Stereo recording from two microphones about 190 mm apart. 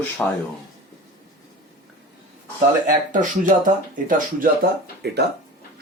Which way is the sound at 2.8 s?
40° right (ahead or behind).